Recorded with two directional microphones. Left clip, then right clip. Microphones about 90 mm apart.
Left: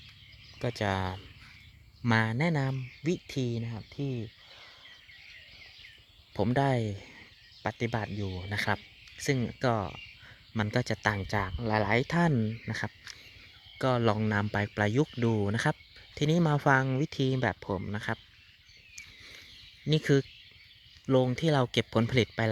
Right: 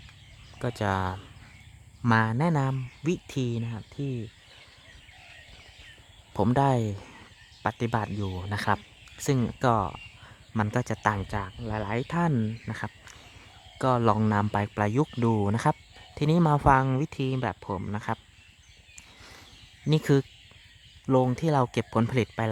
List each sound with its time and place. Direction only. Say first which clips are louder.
0.6 s speech: right 3 dB; 5° right (ahead or behind)
6.3 s speech: right 4 dB; 20° right (ahead or behind)
10.6 s speech: right 2 dB; centre (ahead or behind)
11.4 s speech: left 4 dB; 55° left (ahead or behind)
11.9 s speech: left 1 dB; 15° left (ahead or behind)
12.3 s speech: right 1 dB; 5° right (ahead or behind)
12.6 s speech: even; 10° left (ahead or behind)
13.7 s speech: right 4 dB; 10° right (ahead or behind)
17.3 s speech: even; 15° left (ahead or behind)
17.7 s speech: right 2 dB; centre (ahead or behind)
19.9 s speech: right 2 dB; 15° right (ahead or behind)
21.1 s speech: right 2 dB; centre (ahead or behind)